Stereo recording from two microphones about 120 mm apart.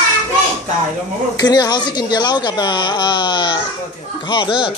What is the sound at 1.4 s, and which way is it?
Speech, 35° left (ahead or behind).